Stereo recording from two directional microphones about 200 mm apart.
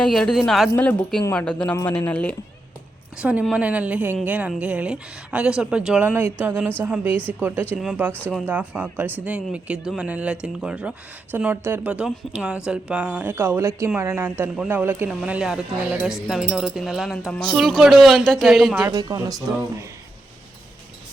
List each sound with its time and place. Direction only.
0.0 s speech: 5° left (ahead or behind)
3.2 s a woman's voice: 5° right (ahead or behind)
18.9 s speech: 20° right (ahead or behind)